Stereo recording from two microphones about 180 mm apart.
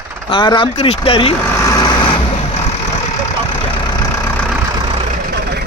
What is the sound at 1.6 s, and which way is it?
Vehicle, 20° left (ahead or behind).